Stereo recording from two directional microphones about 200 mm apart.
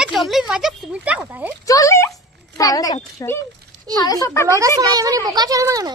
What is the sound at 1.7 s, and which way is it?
A child's voice, 15° left (ahead or behind).